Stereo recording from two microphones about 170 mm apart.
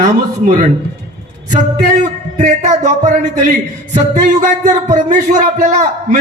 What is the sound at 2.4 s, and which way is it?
Speech, 45° right (ahead or behind).